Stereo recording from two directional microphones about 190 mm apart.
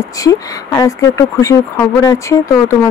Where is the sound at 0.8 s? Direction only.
15° left (ahead or behind).